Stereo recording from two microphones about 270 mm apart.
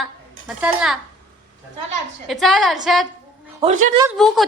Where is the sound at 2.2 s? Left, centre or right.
Centre.